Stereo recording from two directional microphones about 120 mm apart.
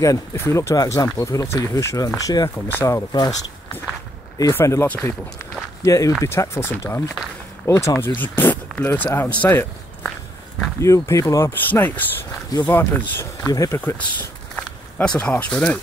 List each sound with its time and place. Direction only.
0.0 s speech: 25° left (ahead or behind)
4.4 s speech: 25° left (ahead or behind)
5.8 s speech: 30° left (ahead or behind)
10.8 s speech: 25° left (ahead or behind)
12.4 s speech: 35° left (ahead or behind)
12.7 s speech: 20° left (ahead or behind)
14.5 s speech: 10° left (ahead or behind)